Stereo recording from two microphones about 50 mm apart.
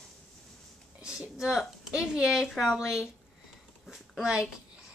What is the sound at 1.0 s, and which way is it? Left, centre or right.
A woman's voice, centre.